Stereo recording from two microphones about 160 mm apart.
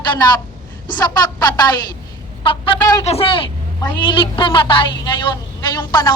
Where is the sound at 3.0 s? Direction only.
40° left (ahead or behind).